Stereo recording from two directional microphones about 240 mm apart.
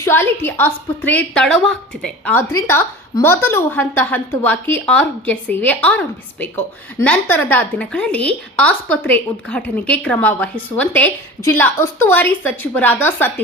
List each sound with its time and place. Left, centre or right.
0.0 s a woman's voice: centre